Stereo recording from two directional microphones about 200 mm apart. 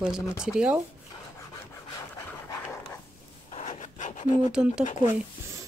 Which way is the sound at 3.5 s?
35° left (ahead or behind).